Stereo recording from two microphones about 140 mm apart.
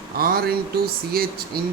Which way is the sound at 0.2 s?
90° right.